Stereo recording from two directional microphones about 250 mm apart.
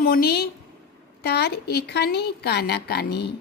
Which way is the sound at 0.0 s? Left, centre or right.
Left.